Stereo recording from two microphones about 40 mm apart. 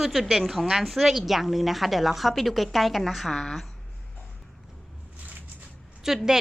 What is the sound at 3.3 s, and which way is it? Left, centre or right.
Speech, centre.